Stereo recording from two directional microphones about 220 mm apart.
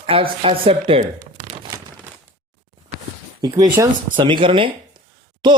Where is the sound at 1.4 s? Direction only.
35° right (ahead or behind).